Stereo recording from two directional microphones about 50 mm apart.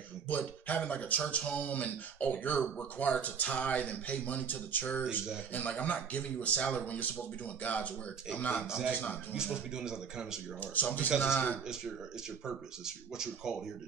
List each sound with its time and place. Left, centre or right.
0.3 s speech: left
8.6 s speech: centre
10.6 s speech: left
12.4 s speech: centre